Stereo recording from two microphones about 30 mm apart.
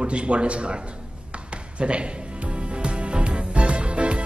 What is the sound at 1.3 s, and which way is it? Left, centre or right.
Music, right.